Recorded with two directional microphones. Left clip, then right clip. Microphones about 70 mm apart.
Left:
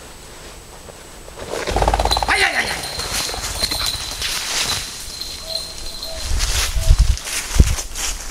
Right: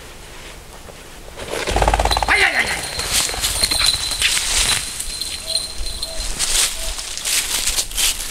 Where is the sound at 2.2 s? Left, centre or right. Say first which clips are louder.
Right 3 dB; centre.